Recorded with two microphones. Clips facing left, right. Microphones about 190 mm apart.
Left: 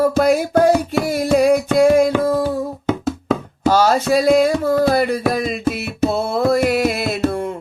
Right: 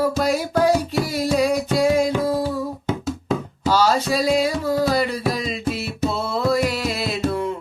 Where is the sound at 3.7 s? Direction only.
50° left (ahead or behind).